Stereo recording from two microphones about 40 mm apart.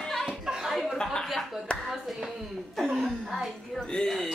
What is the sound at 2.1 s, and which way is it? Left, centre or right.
A woman's voice, centre.